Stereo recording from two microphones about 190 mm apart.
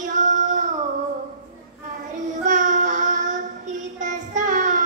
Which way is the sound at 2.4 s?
40° right (ahead or behind).